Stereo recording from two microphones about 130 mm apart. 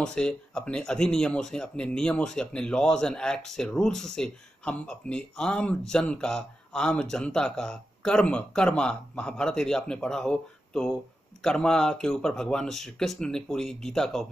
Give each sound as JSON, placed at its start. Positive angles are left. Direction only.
{"t": 0.0, "sound": "speech", "side_deg": 5}